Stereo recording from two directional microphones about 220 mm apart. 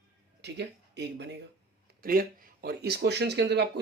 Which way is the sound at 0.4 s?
50° right (ahead or behind).